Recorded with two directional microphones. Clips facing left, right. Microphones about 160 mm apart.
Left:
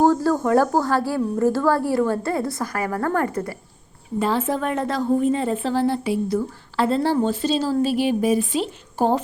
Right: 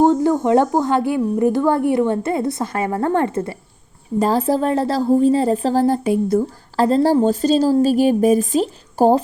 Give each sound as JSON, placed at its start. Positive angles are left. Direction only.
{"t": 0.0, "sound": "a woman's voice", "side_deg": -20}
{"t": 4.2, "sound": "a woman's voice", "side_deg": -40}